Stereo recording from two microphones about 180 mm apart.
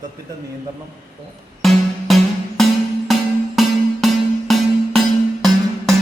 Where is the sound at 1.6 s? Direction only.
Centre (ahead or behind).